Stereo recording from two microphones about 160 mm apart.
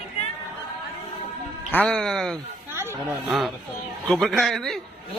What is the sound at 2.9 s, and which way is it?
Speech, 10° right (ahead or behind).